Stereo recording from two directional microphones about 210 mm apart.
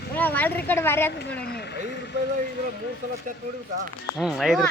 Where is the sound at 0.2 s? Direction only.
10° left (ahead or behind).